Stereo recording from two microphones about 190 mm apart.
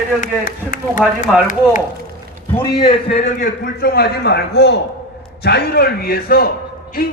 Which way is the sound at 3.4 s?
55° left (ahead or behind).